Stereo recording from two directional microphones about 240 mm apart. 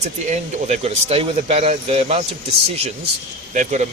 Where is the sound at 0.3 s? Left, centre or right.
Right.